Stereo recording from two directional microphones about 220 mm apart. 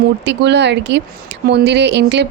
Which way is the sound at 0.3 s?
50° right (ahead or behind).